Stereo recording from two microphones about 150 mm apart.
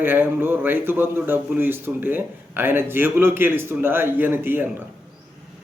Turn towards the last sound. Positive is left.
turn(degrees=-15)  # may be behind; listen again after turning